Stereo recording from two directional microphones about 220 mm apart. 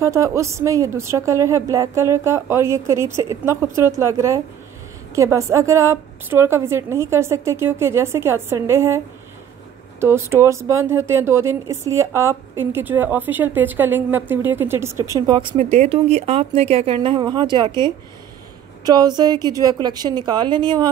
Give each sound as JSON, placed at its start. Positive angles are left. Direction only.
{"t": 0.0, "sound": "a woman's voice", "side_deg": -15}
{"t": 15.5, "sound": "speech", "side_deg": -30}